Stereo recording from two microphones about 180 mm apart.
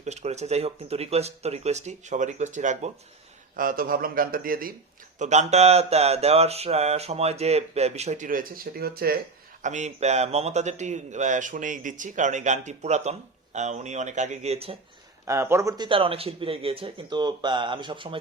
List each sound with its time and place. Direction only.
0.0 s a man's voice: 40° right (ahead or behind)
5.2 s a man's voice: 40° right (ahead or behind); by 9.1 s 60° right (ahead or behind)
9.6 s a man's voice: 40° right (ahead or behind)
15.3 s a man's voice: 15° right (ahead or behind)
15.9 s speech: 30° right (ahead or behind)